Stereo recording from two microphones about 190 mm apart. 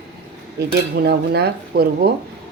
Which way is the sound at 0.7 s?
60° right (ahead or behind).